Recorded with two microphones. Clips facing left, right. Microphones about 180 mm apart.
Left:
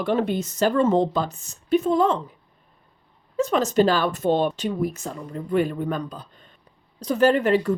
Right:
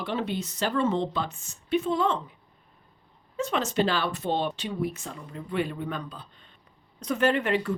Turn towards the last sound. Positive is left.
turn(degrees=40)  # may be behind; listen again after turning